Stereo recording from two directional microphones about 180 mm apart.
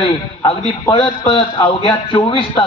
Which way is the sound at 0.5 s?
30° left (ahead or behind).